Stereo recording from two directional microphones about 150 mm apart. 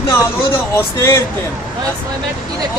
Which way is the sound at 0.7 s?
15° left (ahead or behind).